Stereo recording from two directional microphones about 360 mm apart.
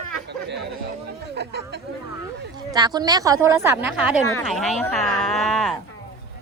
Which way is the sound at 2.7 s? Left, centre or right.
Centre.